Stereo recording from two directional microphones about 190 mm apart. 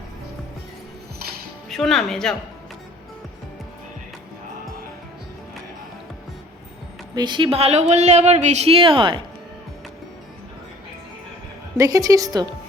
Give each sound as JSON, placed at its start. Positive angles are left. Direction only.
{"t": 1.7, "sound": "speech", "side_deg": 0}
{"t": 7.2, "sound": "a woman's voice", "side_deg": -25}
{"t": 11.8, "sound": "a woman's voice", "side_deg": -20}